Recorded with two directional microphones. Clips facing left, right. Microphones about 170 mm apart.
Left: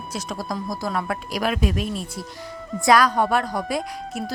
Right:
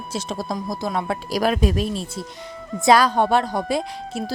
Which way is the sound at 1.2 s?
35° right (ahead or behind).